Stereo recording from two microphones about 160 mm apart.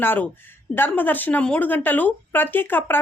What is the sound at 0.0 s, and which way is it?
Speech, 10° left (ahead or behind).